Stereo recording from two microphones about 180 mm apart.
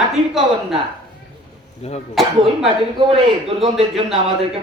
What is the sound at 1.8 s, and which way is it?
Speech, 35° left (ahead or behind).